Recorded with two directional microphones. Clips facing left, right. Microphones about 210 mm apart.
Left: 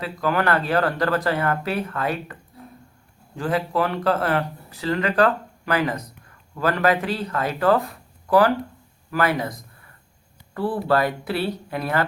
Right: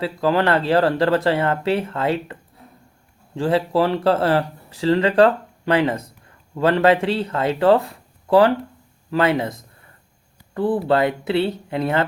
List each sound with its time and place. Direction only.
0.0 s speech: 30° right (ahead or behind)